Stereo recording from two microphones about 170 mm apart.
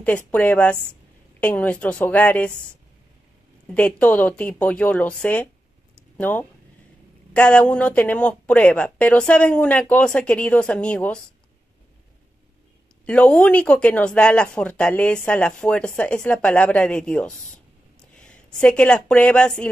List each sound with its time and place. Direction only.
0.0 s speech: 10° left (ahead or behind)
3.7 s speech: 10° left (ahead or behind)
13.0 s speech: 5° left (ahead or behind)